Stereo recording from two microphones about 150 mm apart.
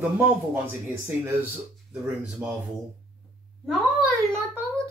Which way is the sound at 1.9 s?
5° right (ahead or behind).